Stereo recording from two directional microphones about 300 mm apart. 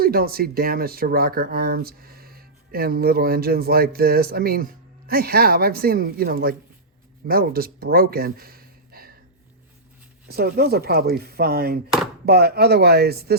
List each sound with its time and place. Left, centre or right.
0.0 s speech: right
10.2 s speech: right